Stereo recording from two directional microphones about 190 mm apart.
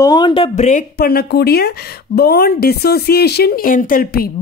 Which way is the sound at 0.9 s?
55° left (ahead or behind).